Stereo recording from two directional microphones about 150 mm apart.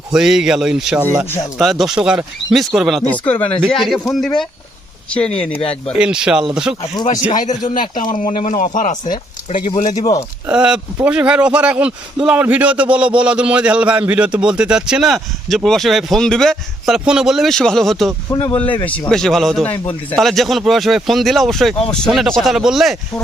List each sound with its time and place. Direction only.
0.1 s speech: 5° right (ahead or behind)
3.1 s speech: 10° left (ahead or behind)
5.5 s speech: 40° left (ahead or behind)
6.0 s speech: 5° right (ahead or behind)
7.3 s speech: 60° left (ahead or behind)
10.4 s a man's voice: 5° right (ahead or behind)
18.3 s speech: 15° left (ahead or behind)